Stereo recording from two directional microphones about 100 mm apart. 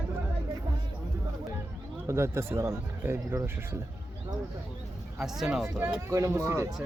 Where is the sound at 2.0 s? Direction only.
30° right (ahead or behind).